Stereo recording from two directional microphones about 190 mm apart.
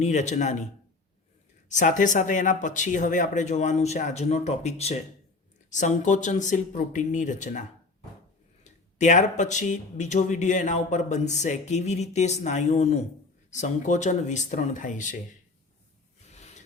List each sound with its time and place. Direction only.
0.0 s speech: 40° left (ahead or behind)
1.7 s speech: 40° left (ahead or behind)
8.6 s speech: 40° left (ahead or behind)
16.3 s a sound: 35° left (ahead or behind)